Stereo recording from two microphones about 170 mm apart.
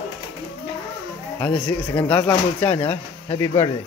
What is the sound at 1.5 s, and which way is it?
Speech, 30° left (ahead or behind).